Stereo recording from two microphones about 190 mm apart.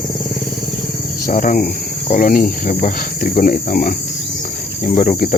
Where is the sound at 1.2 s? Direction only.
45° left (ahead or behind).